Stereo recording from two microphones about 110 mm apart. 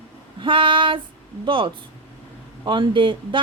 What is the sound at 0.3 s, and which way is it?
Female singing, 50° right (ahead or behind).